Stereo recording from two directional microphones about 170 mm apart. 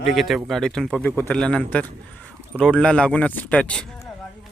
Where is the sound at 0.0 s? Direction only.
Centre (ahead or behind).